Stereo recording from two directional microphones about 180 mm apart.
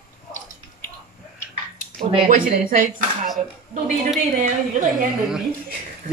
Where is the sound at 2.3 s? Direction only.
50° right (ahead or behind).